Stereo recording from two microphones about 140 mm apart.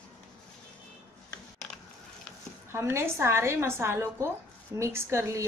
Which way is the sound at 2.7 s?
20° right (ahead or behind).